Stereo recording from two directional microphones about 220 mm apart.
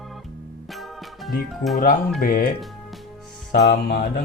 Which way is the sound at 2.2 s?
40° left (ahead or behind).